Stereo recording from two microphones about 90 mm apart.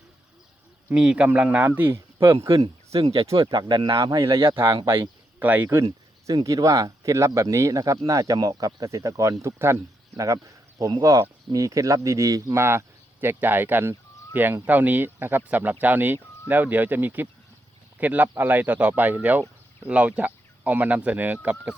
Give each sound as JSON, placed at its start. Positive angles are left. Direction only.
{"t": 0.9, "sound": "speech", "side_deg": -10}
{"t": 2.5, "sound": "speech", "side_deg": -90}
{"t": 3.3, "sound": "speech", "side_deg": -60}
{"t": 3.9, "sound": "speech", "side_deg": -40}
{"t": 4.4, "sound": "speech", "side_deg": -30}
{"t": 5.4, "sound": "speech", "side_deg": -15}
{"t": 5.6, "sound": "speech", "side_deg": -35}